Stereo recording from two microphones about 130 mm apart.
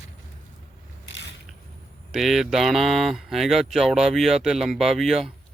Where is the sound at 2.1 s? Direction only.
Centre (ahead or behind).